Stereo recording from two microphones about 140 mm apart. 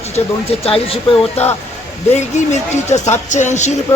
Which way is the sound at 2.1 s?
55° left (ahead or behind).